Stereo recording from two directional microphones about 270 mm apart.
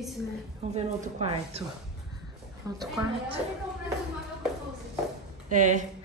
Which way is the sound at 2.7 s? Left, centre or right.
Centre.